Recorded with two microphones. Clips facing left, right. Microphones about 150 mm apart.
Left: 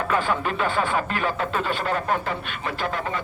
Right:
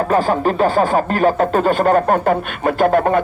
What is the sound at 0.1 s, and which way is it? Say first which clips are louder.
Speech: right 7 dB; 40° right (ahead or behind).